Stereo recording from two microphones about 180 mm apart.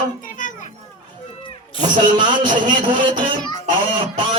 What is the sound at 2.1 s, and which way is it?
A man's voice, 25° right (ahead or behind).